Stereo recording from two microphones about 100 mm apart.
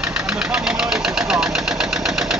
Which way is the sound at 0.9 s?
5° right (ahead or behind).